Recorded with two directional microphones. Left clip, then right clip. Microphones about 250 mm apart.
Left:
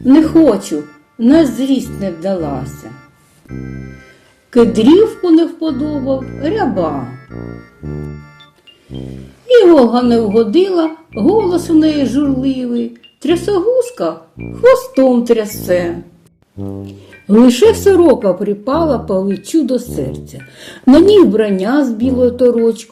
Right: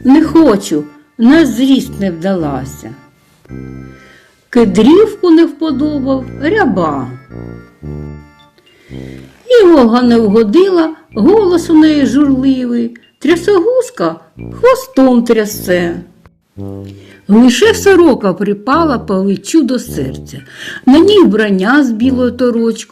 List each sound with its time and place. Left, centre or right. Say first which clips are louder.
0.0 s speech: right 1 dB; right
3.5 s organ: even; centre
4.7 s speech: right 5 dB; right
7.3 s music: even; centre
9.5 s speech: right 1 dB; right
16.6 s organ: even; centre
16.8 s speech: right 2 dB; right